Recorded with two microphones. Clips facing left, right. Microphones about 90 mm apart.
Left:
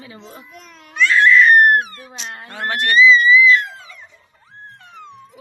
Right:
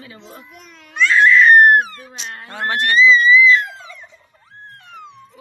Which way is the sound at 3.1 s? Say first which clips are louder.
Even; 20° right (ahead or behind).